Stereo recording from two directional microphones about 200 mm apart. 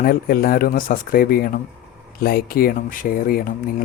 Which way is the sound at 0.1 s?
50° left (ahead or behind).